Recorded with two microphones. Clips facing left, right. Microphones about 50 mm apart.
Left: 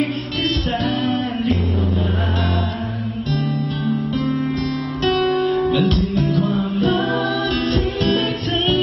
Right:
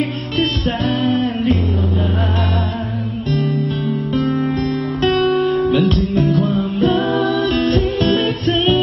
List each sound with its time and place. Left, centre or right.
4.2 s music: centre
5.2 s guitar: centre
5.6 s music: centre
7.1 s music: right